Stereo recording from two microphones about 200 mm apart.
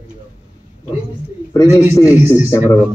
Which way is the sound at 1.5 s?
15° left (ahead or behind).